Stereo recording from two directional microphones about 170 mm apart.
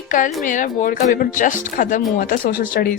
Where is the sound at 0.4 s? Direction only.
50° left (ahead or behind).